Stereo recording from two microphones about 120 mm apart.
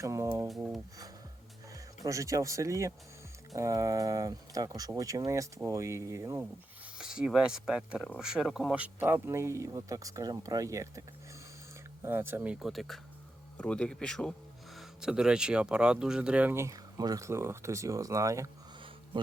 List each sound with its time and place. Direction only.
0.0 s speech: 25° right (ahead or behind)
1.7 s speech: 30° right (ahead or behind)
6.4 s speech: 10° right (ahead or behind); by 11.0 s 25° right (ahead or behind)
12.0 s speech: 20° right (ahead or behind)
19.1 s speech: 40° right (ahead or behind)